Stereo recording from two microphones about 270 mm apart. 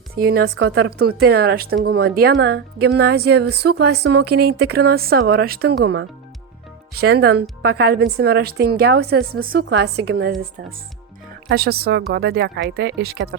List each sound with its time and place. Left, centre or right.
0.2 s speech: right
11.4 s speech: right